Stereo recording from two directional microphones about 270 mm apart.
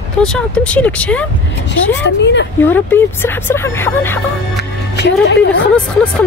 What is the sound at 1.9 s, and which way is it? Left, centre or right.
Speech, left.